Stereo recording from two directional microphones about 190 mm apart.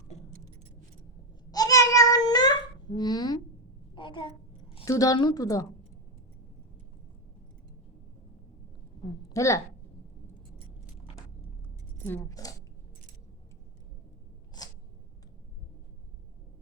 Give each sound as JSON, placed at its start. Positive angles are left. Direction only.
{"t": 1.5, "sound": "a sound", "side_deg": 20}
{"t": 4.9, "sound": "a woman's voice", "side_deg": 20}
{"t": 9.3, "sound": "a woman's voice", "side_deg": 15}
{"t": 12.0, "sound": "speech", "side_deg": 15}